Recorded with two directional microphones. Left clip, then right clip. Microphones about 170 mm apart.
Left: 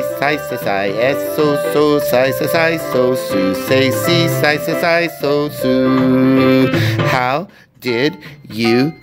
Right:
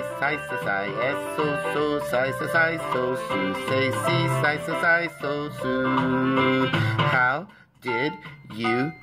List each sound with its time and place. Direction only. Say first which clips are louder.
0.2 s speech: left 6 dB; 40° left (ahead or behind)
3.7 s music: left 10 dB; 40° left (ahead or behind)